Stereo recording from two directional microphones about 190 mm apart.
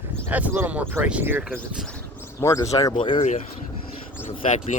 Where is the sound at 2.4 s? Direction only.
20° left (ahead or behind).